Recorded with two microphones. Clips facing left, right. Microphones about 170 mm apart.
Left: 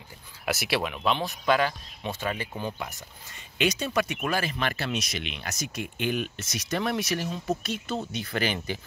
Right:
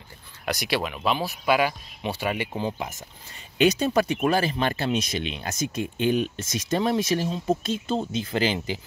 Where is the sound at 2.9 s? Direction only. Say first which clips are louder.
Right 3 dB; 40° right (ahead or behind); by 8.6 s 25° right (ahead or behind).